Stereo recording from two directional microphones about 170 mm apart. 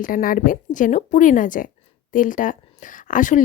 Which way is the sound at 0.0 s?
55° left (ahead or behind).